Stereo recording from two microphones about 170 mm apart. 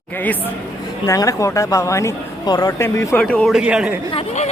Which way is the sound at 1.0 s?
20° left (ahead or behind).